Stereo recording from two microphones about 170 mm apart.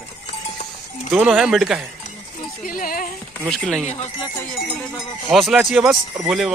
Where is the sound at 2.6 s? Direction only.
55° left (ahead or behind).